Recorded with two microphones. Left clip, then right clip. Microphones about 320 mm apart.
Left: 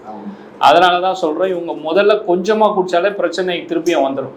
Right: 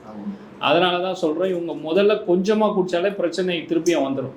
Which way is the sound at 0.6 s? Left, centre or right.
Left.